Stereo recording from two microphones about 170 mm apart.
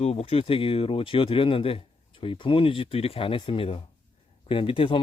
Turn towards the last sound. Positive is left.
turn(degrees=30)  # may be behind; listen again after turning